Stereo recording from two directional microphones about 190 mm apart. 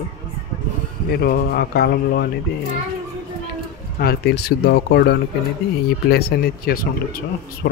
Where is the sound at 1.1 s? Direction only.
55° left (ahead or behind).